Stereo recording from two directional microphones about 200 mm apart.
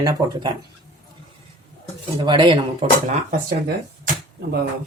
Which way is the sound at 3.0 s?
35° right (ahead or behind).